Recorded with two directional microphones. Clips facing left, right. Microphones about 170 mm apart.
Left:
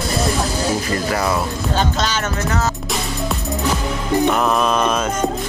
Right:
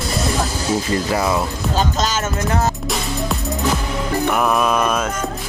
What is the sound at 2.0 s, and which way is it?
Music, 40° right (ahead or behind).